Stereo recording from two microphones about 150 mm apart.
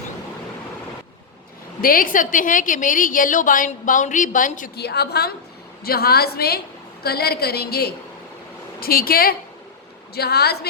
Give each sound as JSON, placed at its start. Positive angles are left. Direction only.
{"t": 1.8, "sound": "a woman's voice", "side_deg": 70}
{"t": 8.8, "sound": "a woman's voice", "side_deg": 80}
{"t": 10.2, "sound": "a woman's voice", "side_deg": 90}